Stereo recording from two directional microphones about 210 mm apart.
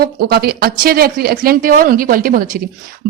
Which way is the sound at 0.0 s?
50° right (ahead or behind).